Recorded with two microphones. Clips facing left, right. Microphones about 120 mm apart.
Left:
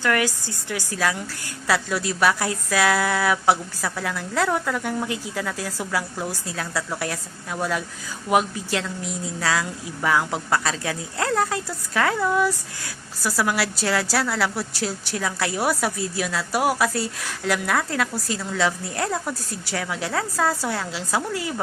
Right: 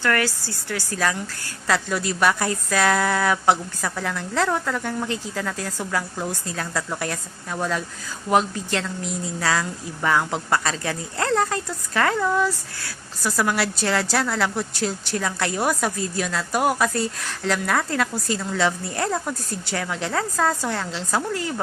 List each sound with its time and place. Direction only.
0.0 s a woman's voice: 15° left (ahead or behind)
0.9 s a woman's voice: 5° left (ahead or behind)